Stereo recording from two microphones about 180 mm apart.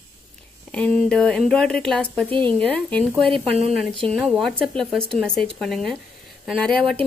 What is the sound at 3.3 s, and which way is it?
Speech, 35° right (ahead or behind).